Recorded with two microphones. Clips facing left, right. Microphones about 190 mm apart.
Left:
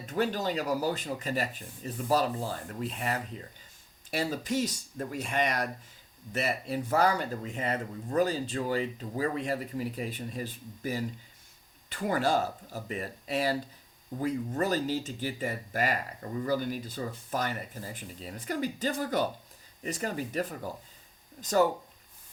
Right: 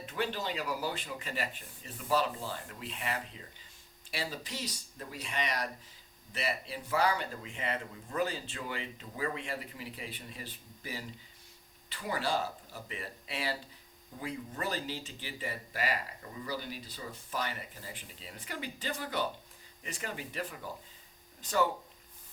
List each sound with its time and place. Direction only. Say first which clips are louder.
0.0 s speech: left 6 dB; 40° left (ahead or behind)